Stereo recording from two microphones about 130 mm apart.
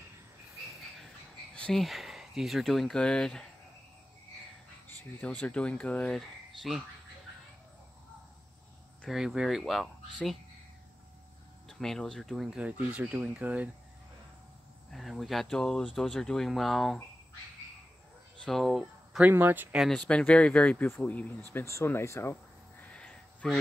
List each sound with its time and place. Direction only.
0.9 s cricket: 5° left (ahead or behind)
4.8 s speech: 10° left (ahead or behind)
9.0 s speech: 5° right (ahead or behind)
11.8 s speech: 5° left (ahead or behind)
14.9 s speech: centre (ahead or behind)
18.4 s speech: centre (ahead or behind)
19.3 s speech: 15° right (ahead or behind)
19.8 s speech: 5° left (ahead or behind)
22.9 s a sound: 10° left (ahead or behind)